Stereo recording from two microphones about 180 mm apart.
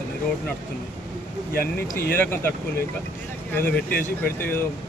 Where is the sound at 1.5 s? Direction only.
60° left (ahead or behind).